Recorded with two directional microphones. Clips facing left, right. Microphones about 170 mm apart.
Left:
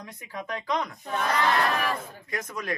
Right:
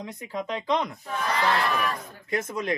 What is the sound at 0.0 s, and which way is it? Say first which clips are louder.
Speech: right 5 dB; 20° right (ahead or behind).